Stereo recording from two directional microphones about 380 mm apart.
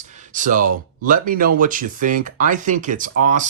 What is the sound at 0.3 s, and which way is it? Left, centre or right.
Speech, right.